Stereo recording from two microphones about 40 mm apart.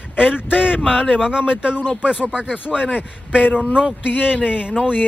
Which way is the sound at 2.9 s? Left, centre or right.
Right.